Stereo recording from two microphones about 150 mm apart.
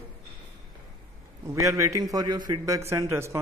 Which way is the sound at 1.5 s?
20° right (ahead or behind).